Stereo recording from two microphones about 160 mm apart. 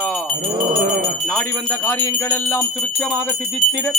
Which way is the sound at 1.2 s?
10° left (ahead or behind).